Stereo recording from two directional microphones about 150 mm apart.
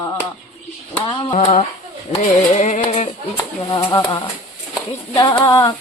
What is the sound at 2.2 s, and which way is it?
Music, 55° left (ahead or behind).